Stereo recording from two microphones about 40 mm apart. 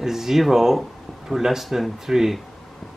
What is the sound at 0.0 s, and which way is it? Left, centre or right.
Speech, centre.